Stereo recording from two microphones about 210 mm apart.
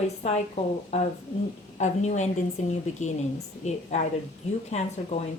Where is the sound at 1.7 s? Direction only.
35° left (ahead or behind).